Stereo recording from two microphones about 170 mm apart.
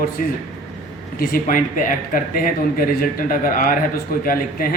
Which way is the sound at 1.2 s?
55° left (ahead or behind).